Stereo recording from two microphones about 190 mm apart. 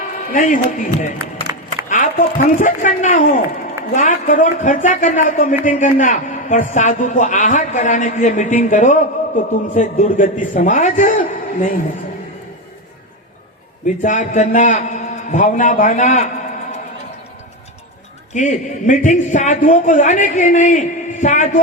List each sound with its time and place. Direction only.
0.3 s speech: 45° left (ahead or behind)
13.8 s speech: 40° left (ahead or behind)
18.3 s speech: 40° left (ahead or behind)